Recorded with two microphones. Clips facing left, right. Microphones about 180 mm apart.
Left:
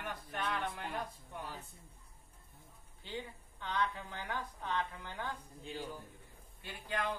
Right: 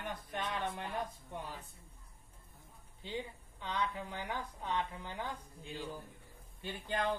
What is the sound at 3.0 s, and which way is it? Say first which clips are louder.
A woman's voice: right 2 dB; 15° right (ahead or behind).